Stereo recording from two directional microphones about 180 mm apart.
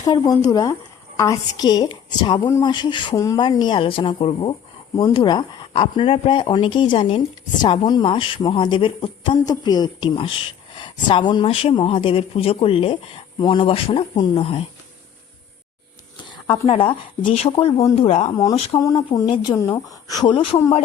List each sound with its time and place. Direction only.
0.0 s a woman's voice: 20° left (ahead or behind)
16.1 s speech: 30° left (ahead or behind)
18.8 s a woman's voice: 20° left (ahead or behind)